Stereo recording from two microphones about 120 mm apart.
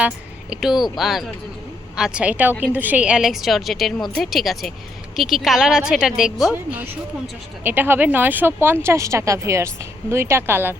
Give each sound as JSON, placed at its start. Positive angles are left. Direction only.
{"t": 0.5, "sound": "a woman's voice", "side_deg": -5}
{"t": 7.6, "sound": "a woman's voice", "side_deg": -15}